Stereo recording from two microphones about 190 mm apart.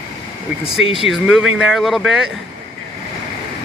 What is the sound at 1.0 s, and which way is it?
Speech, centre (ahead or behind).